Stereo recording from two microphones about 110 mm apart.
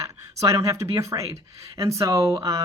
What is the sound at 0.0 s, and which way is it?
Speech, 30° right (ahead or behind).